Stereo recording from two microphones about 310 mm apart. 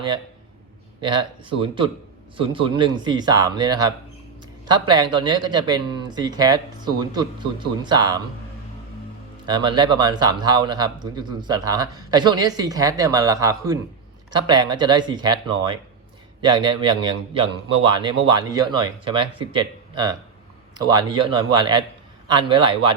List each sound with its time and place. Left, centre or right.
1.0 s a man's voice: centre
9.5 s a man's voice: centre